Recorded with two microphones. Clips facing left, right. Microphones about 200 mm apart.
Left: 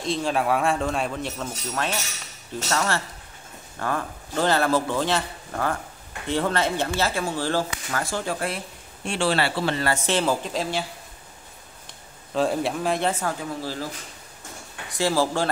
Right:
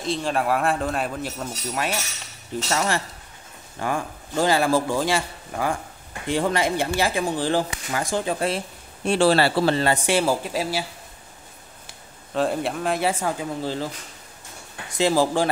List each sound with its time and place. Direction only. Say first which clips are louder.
0.0 s a man's voice: even; centre (ahead or behind); by 8.5 s 20° right (ahead or behind)
9.0 s speech: right 5 dB; 40° right (ahead or behind)
9.8 s speech: right 2 dB; 15° right (ahead or behind)
12.4 s speech: even; centre (ahead or behind); by 13.8 s 20° right (ahead or behind)
14.9 s speech: right 3 dB; 20° right (ahead or behind)